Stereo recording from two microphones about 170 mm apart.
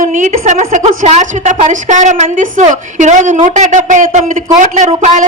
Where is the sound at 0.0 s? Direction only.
45° right (ahead or behind).